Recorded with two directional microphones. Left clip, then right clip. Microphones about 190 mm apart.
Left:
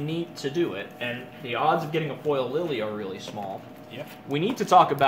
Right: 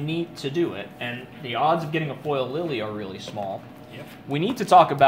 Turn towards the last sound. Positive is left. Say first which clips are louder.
# right 3 dB
turn(degrees=-30)  # may be behind; listen again after turning